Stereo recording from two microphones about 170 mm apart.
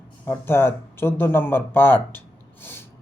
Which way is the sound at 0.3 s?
15° left (ahead or behind).